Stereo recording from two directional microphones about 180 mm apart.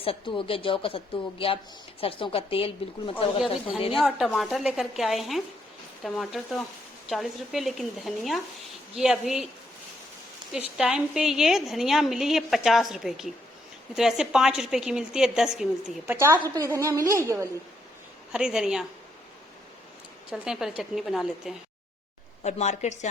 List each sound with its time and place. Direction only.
0.0 s a woman's voice: 30° left (ahead or behind)
3.9 s a woman's voice: centre (ahead or behind)
10.8 s a woman's voice: 5° right (ahead or behind)
20.3 s a woman's voice: 5° right (ahead or behind)
22.4 s a woman's voice: 40° left (ahead or behind)